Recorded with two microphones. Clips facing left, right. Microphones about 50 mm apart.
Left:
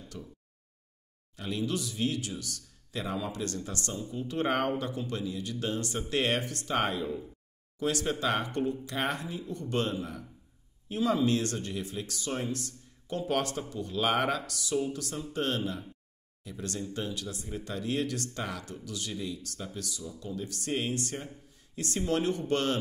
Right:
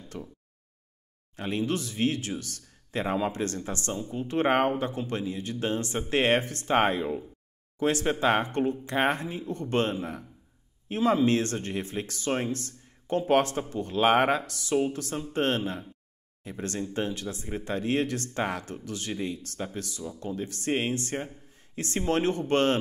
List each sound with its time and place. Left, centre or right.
0.1 s speech: right
1.3 s speech: right